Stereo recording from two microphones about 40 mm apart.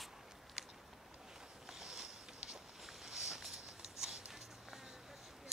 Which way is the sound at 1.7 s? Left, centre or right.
Centre.